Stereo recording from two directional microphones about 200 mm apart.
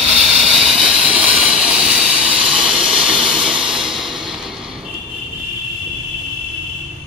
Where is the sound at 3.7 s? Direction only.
Centre (ahead or behind).